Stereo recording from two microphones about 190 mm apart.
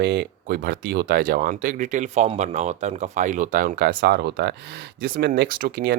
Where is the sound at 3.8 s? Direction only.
60° right (ahead or behind).